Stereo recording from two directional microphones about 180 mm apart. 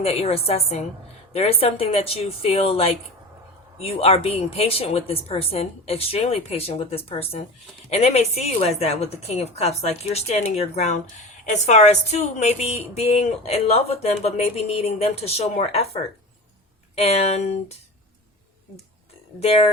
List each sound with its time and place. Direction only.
0.0 s a woman's voice: 35° left (ahead or behind)
17.0 s a woman's voice: 35° left (ahead or behind)
19.4 s a woman's voice: 35° left (ahead or behind)